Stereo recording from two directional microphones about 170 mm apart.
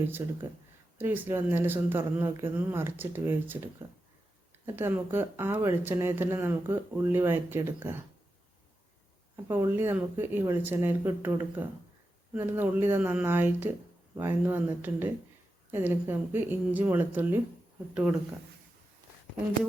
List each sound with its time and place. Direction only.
0.2 s speech: 15° right (ahead or behind)
4.6 s speech: 15° right (ahead or behind)
9.3 s speech: 15° right (ahead or behind)